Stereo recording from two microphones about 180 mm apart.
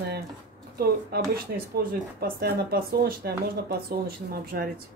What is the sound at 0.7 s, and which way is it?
Speech, 60° right (ahead or behind).